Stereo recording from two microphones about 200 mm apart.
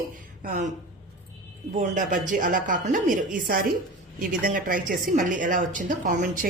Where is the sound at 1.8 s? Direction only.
40° right (ahead or behind).